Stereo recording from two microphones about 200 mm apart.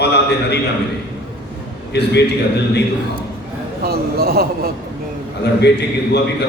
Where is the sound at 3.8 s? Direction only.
50° right (ahead or behind).